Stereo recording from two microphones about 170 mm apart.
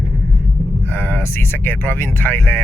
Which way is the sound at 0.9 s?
10° left (ahead or behind).